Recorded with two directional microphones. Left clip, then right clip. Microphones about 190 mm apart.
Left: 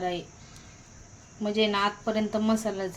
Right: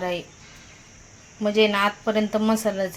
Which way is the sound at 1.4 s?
25° right (ahead or behind).